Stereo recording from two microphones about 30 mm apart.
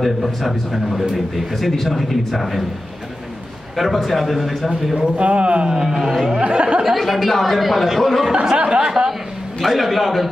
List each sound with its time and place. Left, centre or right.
0.0 s a man's voice: centre
3.7 s a man's voice: centre
4.9 s speech: right
5.2 s speech: right
5.9 s speech: centre
6.4 s speech: right
7.0 s a man's voice: centre
8.5 s speech: right
9.7 s a man's voice: centre